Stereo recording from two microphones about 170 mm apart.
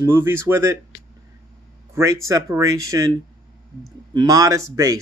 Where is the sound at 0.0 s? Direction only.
15° right (ahead or behind).